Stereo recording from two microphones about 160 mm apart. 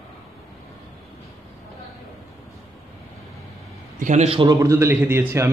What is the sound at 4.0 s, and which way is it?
Speech, 45° right (ahead or behind).